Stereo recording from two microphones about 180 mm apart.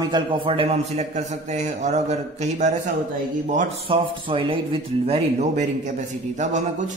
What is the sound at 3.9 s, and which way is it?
A man's voice, 30° right (ahead or behind).